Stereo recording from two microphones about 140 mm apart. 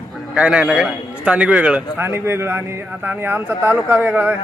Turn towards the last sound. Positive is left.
turn(degrees=-15)  # may be behind; listen again after turning